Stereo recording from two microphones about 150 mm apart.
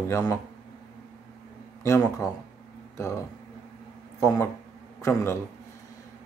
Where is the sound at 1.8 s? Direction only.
20° left (ahead or behind).